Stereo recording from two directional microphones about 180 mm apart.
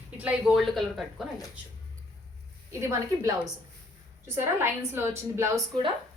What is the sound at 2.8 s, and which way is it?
Speech, 15° right (ahead or behind).